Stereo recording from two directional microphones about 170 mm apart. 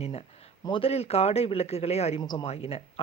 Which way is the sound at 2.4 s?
35° left (ahead or behind).